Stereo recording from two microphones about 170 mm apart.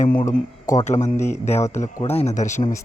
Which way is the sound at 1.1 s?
15° left (ahead or behind).